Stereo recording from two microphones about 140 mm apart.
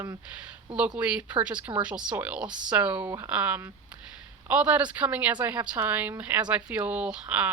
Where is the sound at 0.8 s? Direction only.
10° right (ahead or behind).